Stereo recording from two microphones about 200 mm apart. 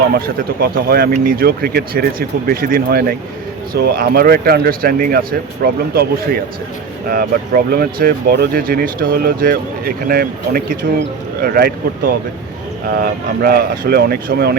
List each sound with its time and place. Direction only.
0.6 s speech: 50° right (ahead or behind)